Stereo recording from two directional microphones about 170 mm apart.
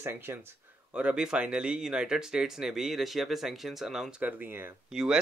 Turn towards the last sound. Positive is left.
turn(degrees=0)  # may be behind; listen again after turning